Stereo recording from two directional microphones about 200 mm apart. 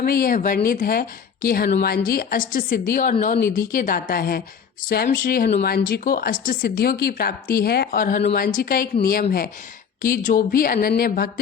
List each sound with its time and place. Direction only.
0.0 s a woman's voice: 45° left (ahead or behind)